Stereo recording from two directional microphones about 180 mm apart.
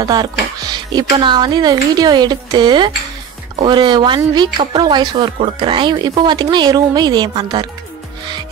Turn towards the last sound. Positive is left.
turn(degrees=-20)  # may be behind; listen again after turning